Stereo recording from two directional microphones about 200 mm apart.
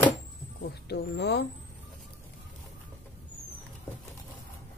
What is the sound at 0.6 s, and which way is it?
Speech, 50° left (ahead or behind).